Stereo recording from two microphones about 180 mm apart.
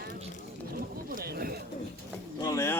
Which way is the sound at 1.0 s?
55° right (ahead or behind).